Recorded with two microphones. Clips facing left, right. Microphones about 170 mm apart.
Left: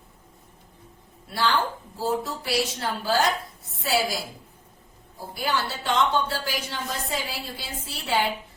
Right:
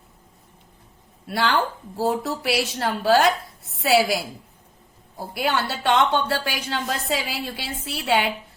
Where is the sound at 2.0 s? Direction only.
70° right (ahead or behind).